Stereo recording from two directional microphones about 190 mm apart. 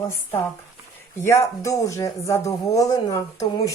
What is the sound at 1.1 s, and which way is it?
Speech, 15° left (ahead or behind).